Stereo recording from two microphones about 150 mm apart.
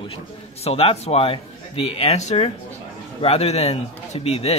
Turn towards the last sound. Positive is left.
turn(degrees=45)  # may be behind; listen again after turning